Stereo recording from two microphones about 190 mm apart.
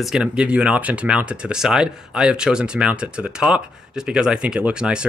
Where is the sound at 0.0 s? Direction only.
5° right (ahead or behind).